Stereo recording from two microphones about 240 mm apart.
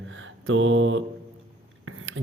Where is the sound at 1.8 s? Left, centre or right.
Right.